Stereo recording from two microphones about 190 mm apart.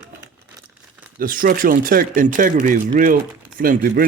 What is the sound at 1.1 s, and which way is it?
Speech, 45° right (ahead or behind).